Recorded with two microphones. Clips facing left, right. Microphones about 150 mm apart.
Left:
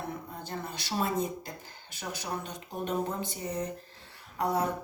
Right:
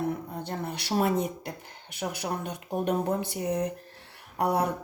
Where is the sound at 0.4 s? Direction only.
65° right (ahead or behind).